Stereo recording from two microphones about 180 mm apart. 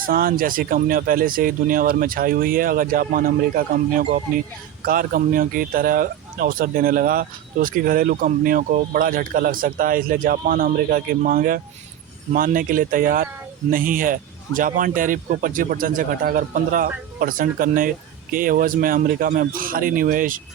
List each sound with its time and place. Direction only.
0.0 s speech: 50° right (ahead or behind)